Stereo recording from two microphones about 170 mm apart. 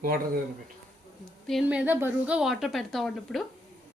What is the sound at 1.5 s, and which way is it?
A woman's voice, 5° right (ahead or behind).